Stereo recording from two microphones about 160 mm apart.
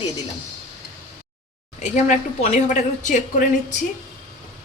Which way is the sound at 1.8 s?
45° left (ahead or behind).